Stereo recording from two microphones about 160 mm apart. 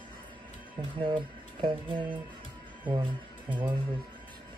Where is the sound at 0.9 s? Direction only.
30° right (ahead or behind).